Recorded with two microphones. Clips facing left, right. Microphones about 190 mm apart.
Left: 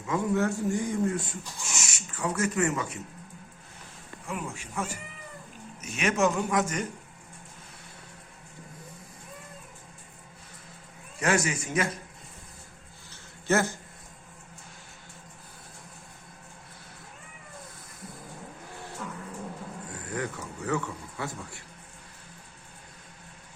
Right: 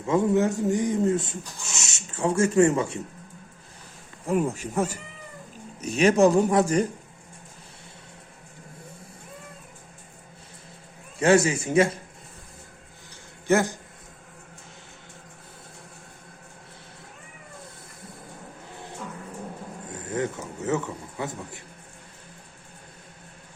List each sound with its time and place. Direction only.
0.0 s speech: 20° right (ahead or behind)
4.3 s speech: 40° right (ahead or behind)
11.2 s speech: 30° right (ahead or behind)
13.5 s speech: 15° right (ahead or behind)
19.9 s speech: 20° right (ahead or behind)